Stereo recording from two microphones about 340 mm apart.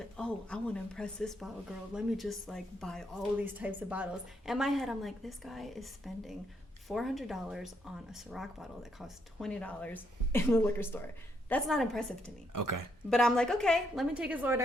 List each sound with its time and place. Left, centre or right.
0.2 s a woman's voice: centre
12.5 s speech: right
13.1 s a woman's voice: centre